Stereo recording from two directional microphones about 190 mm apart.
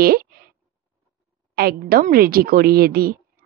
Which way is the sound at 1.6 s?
50° right (ahead or behind).